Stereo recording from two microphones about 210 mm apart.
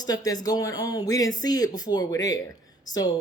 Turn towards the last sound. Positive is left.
turn(degrees=15)  # may be behind; listen again after turning